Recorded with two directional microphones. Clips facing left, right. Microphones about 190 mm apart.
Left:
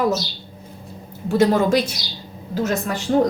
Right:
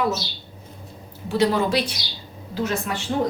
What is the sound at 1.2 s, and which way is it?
A woman's voice, 45° left (ahead or behind).